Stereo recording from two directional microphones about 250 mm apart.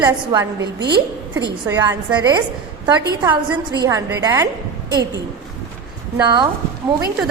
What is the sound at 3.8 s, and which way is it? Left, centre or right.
Speech, centre.